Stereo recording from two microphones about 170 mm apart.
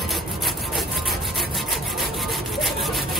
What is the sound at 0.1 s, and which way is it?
Wood, centre (ahead or behind).